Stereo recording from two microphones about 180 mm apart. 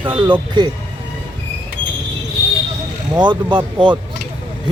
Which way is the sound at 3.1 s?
25° right (ahead or behind).